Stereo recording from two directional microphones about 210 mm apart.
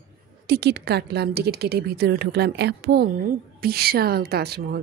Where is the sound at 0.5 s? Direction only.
50° right (ahead or behind).